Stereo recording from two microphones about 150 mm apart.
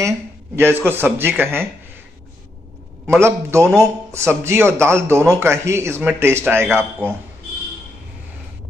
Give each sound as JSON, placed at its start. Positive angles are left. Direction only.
{"t": 0.6, "sound": "a man's voice", "side_deg": -15}
{"t": 3.1, "sound": "a man's voice", "side_deg": -15}